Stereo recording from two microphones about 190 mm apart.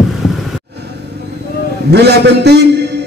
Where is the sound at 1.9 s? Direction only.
60° right (ahead or behind).